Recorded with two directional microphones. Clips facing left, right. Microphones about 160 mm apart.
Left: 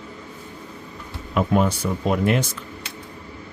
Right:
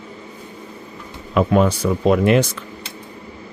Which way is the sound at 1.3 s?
90° right.